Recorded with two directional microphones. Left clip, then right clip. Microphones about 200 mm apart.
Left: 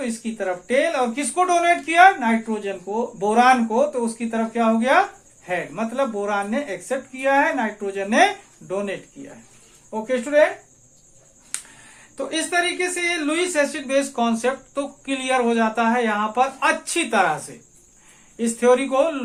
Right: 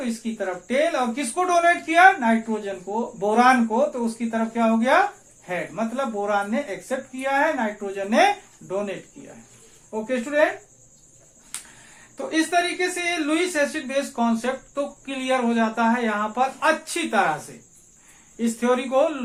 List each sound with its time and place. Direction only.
0.2 s speech: 35° left (ahead or behind)
9.9 s speech: 40° left (ahead or behind)
12.1 s speech: 35° left (ahead or behind)
18.3 s speech: 40° left (ahead or behind)